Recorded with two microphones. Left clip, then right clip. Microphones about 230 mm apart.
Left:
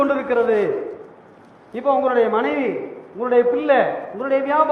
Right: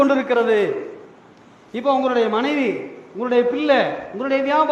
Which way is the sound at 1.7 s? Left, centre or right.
Right.